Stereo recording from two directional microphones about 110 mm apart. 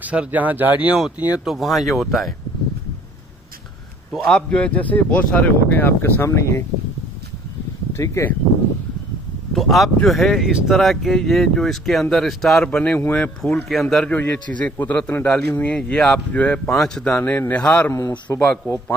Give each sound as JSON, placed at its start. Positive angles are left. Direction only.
{"t": 0.0, "sound": "speech", "side_deg": -15}
{"t": 4.1, "sound": "a man's voice", "side_deg": 5}
{"t": 7.9, "sound": "speech", "side_deg": 25}
{"t": 9.5, "sound": "a man's voice", "side_deg": 0}
{"t": 14.1, "sound": "a man's voice", "side_deg": 15}